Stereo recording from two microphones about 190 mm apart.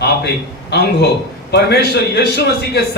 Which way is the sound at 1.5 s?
60° left (ahead or behind).